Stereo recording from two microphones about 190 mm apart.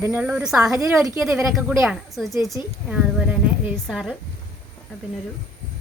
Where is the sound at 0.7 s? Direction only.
15° right (ahead or behind).